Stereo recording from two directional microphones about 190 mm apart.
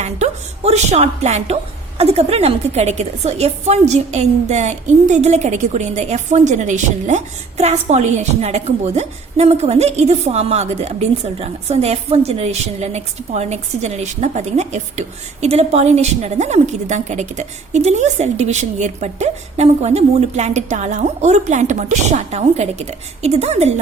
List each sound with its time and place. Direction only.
0.0 s a woman's voice: 35° right (ahead or behind)